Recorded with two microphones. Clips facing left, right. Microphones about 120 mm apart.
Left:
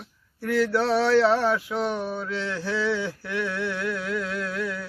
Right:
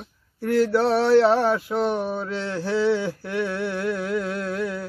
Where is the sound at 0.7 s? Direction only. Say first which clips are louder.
Right 3 dB; 20° right (ahead or behind).